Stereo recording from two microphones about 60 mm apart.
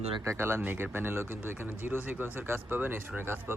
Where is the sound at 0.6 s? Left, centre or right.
Right.